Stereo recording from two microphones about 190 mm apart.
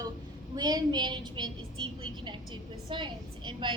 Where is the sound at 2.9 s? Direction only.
25° right (ahead or behind).